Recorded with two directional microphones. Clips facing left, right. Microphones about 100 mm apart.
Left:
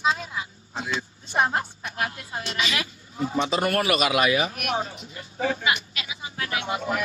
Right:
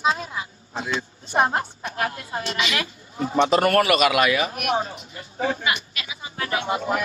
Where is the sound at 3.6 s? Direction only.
45° right (ahead or behind).